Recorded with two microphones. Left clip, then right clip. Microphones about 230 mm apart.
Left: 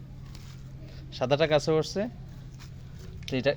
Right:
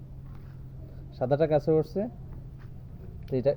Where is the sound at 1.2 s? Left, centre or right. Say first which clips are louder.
Left 1 dB; centre.